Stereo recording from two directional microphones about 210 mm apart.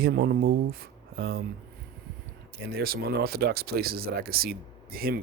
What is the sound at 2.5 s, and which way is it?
Speech, 45° right (ahead or behind).